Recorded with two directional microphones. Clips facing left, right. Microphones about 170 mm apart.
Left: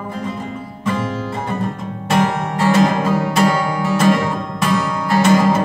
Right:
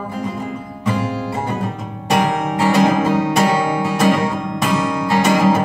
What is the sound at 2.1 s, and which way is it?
Music, 15° right (ahead or behind).